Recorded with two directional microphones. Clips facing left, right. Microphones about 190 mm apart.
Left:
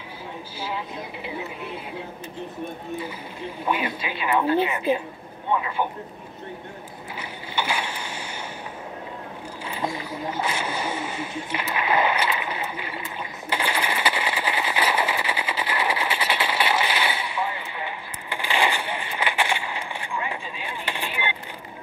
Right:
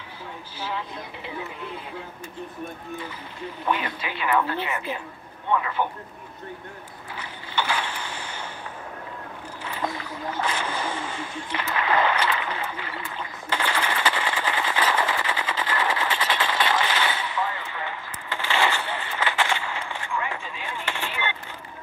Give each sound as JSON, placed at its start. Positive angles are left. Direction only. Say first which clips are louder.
{"t": 0.6, "sound": "speech", "louder": "left 1 dB", "side_deg": 10}
{"t": 3.6, "sound": "speech", "louder": "left 1 dB", "side_deg": 15}
{"t": 7.2, "sound": "boat", "louder": "even", "side_deg": 10}
{"t": 9.7, "sound": "boat", "louder": "left 1 dB", "side_deg": 15}
{"t": 10.3, "sound": "a sound", "louder": "right 1 dB", "side_deg": 10}